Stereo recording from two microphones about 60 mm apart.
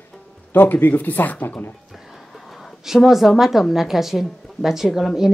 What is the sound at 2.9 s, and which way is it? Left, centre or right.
Speech, centre.